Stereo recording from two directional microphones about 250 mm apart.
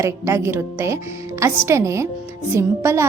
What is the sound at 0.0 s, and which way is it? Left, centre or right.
A woman's voice, centre.